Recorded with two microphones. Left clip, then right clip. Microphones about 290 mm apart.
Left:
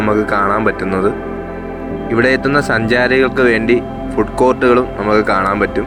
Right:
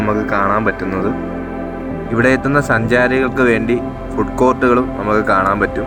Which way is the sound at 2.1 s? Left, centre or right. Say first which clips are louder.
Left 1 dB; left.